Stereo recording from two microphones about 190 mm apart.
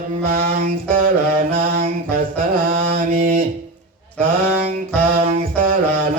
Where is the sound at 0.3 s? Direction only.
50° right (ahead or behind).